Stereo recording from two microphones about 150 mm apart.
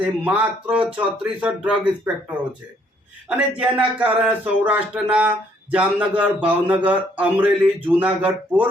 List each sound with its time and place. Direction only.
0.0 s speech: 10° right (ahead or behind)
3.2 s speech: 5° right (ahead or behind)